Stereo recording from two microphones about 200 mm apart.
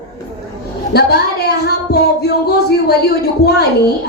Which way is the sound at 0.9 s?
50° left (ahead or behind).